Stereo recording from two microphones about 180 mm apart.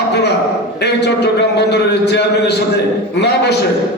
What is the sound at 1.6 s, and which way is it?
Speech, 70° left (ahead or behind).